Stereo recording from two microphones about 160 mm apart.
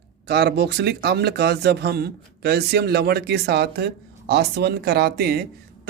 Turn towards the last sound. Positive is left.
turn(degrees=-85)